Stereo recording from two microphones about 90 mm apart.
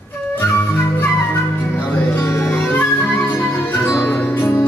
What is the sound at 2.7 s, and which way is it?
Music, 20° left (ahead or behind).